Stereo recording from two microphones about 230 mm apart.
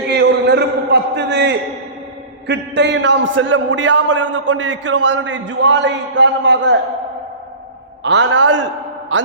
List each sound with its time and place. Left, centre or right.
0.1 s a sound: right
2.5 s a man's voice: right
8.0 s a man's voice: right